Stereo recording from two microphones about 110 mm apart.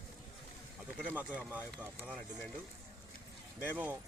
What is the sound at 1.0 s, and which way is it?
Speech, 15° right (ahead or behind).